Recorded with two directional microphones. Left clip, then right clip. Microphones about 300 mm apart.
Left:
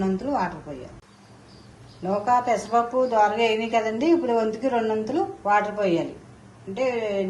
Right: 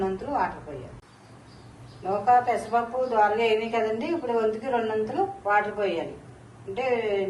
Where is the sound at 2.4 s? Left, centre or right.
Left.